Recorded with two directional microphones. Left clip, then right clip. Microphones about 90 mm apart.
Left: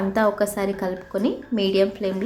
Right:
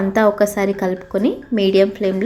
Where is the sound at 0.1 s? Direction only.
40° right (ahead or behind).